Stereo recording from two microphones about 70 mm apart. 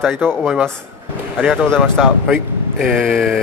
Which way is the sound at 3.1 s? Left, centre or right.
Centre.